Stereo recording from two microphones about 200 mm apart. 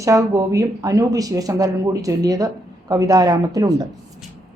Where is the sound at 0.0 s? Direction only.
15° right (ahead or behind).